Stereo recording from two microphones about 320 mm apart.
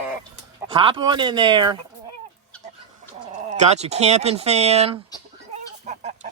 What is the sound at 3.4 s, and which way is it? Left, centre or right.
Speech, right.